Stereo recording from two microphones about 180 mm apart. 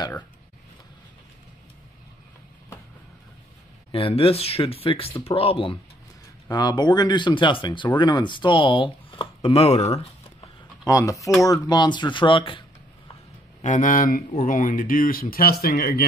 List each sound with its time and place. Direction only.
3.9 s speech: 30° left (ahead or behind)
10.9 s speech: 15° left (ahead or behind)
13.6 s speech: 45° left (ahead or behind)